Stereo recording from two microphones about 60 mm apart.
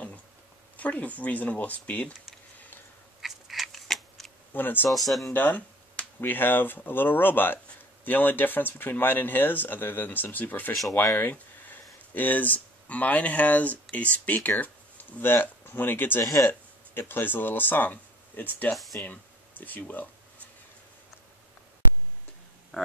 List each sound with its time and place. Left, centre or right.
0.7 s speech: left
3.2 s scissors: centre
4.6 s speech: left
4.9 s speech: centre
5.3 s speech: left
18.7 s speech: centre
18.9 s speech: left
22.7 s speech: left